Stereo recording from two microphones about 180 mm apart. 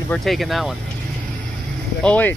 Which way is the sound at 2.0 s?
10° left (ahead or behind).